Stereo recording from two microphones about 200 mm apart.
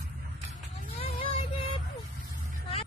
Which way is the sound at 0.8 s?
40° left (ahead or behind).